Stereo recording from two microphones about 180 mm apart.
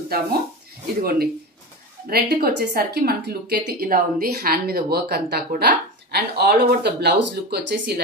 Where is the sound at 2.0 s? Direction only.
60° right (ahead or behind).